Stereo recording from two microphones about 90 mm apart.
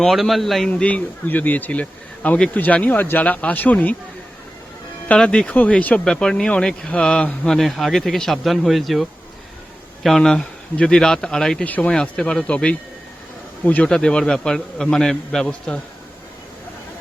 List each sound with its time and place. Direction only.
0.0 s a man's voice: centre (ahead or behind)
0.7 s speech: 15° left (ahead or behind)
5.0 s a man's voice: 10° left (ahead or behind)